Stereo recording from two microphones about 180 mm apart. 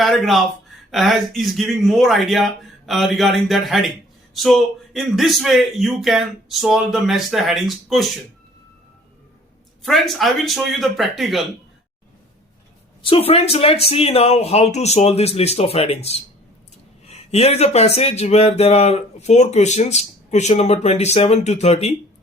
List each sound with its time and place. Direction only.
0.0 s a man's voice: centre (ahead or behind)
9.8 s a man's voice: centre (ahead or behind)
13.1 s speech: 30° left (ahead or behind)